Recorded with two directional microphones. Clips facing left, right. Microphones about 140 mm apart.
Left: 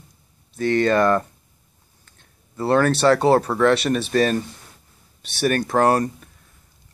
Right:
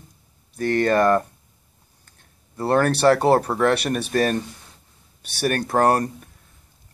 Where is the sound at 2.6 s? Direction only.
15° right (ahead or behind).